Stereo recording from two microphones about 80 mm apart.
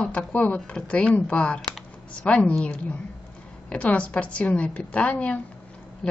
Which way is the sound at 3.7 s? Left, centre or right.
Centre.